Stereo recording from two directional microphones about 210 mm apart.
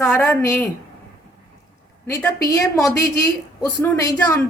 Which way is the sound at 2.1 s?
15° left (ahead or behind).